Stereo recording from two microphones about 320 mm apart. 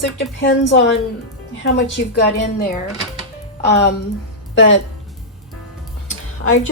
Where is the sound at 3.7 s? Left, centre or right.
Left.